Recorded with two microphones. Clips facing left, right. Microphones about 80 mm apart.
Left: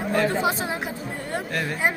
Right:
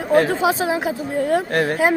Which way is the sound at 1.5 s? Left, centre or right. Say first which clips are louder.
Right 8 dB; right.